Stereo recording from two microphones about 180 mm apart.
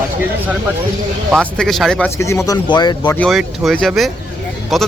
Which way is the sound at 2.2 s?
15° left (ahead or behind).